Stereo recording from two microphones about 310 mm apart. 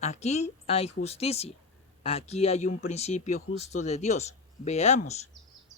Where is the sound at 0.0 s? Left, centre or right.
Left.